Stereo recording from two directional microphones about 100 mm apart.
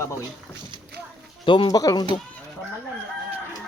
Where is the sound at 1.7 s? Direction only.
40° left (ahead or behind).